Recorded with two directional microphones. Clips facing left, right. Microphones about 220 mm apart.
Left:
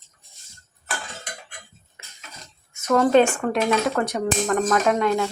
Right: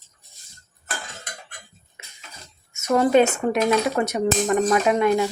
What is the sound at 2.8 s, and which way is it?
A woman's voice, 10° right (ahead or behind).